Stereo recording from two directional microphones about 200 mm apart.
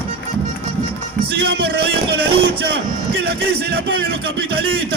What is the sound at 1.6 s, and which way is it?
Speech, 50° right (ahead or behind).